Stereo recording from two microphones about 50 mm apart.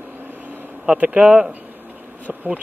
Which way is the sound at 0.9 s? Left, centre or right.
Right.